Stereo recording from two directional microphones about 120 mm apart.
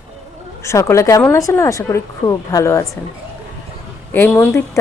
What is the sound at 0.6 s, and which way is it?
Speech, 25° left (ahead or behind).